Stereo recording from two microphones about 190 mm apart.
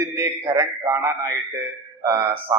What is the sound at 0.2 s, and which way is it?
Speech, 20° right (ahead or behind).